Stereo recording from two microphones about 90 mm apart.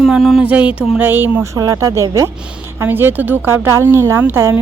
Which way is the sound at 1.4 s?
40° right (ahead or behind).